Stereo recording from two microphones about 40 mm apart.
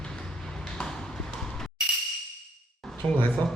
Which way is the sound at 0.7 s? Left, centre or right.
Left.